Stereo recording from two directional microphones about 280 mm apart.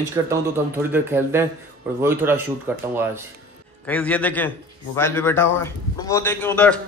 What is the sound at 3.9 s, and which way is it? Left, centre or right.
A man's voice, centre.